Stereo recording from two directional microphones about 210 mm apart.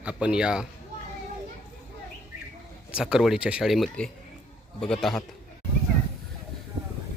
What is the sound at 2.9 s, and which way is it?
Speech, 5° right (ahead or behind).